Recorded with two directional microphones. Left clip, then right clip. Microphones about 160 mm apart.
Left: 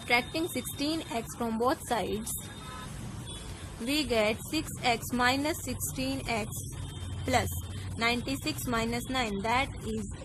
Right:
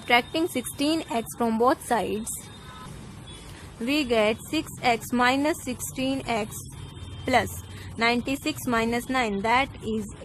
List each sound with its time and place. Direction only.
0.1 s a woman's voice: 40° right (ahead or behind)
3.8 s a woman's voice: 35° right (ahead or behind)
8.0 s a woman's voice: 35° right (ahead or behind)